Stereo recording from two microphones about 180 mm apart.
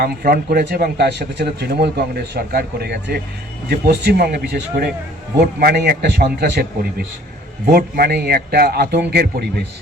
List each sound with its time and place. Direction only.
0.0 s speech: 55° right (ahead or behind)
4.6 s speech: 50° right (ahead or behind)
5.5 s speech: 60° right (ahead or behind)
7.7 s speech: 60° right (ahead or behind)